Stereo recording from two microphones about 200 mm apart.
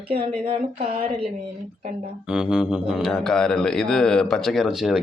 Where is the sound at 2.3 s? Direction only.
5° right (ahead or behind).